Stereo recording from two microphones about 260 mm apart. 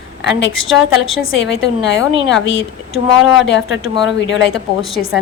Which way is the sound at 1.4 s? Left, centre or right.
Left.